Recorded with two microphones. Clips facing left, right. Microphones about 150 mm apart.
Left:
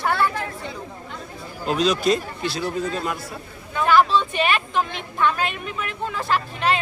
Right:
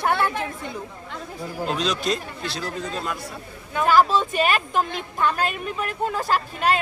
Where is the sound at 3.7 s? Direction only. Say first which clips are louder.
Even; 40° right (ahead or behind).